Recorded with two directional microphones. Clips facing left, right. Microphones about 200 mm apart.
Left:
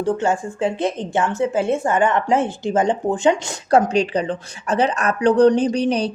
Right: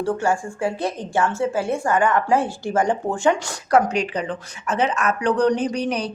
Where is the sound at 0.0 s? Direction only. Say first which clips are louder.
Left 2 dB; 20° left (ahead or behind).